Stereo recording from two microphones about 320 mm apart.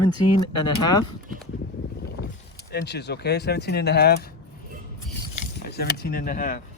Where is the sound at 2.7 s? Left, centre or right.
Left.